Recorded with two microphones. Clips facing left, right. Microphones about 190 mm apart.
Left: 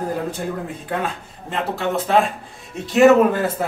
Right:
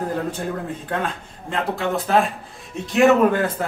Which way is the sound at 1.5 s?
Centre (ahead or behind).